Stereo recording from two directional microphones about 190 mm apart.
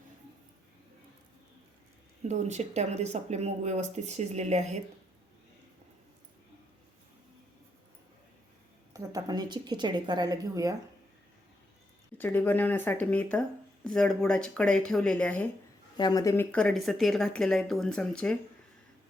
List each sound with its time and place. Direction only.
2.2 s speech: 35° right (ahead or behind)
8.9 s a woman's voice: 20° right (ahead or behind)
12.1 s speech: 10° left (ahead or behind)
16.0 s speech: 20° left (ahead or behind); by 18.3 s 5° left (ahead or behind)